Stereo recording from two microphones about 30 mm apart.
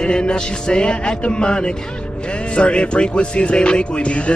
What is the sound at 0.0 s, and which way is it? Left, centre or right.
Music, left.